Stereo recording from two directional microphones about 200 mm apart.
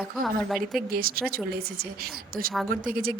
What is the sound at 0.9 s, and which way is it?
Speech, 45° right (ahead or behind).